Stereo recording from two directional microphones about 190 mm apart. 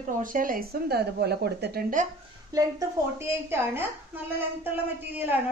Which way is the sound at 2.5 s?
20° right (ahead or behind).